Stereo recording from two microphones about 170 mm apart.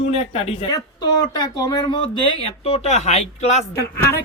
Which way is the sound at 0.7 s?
25° left (ahead or behind).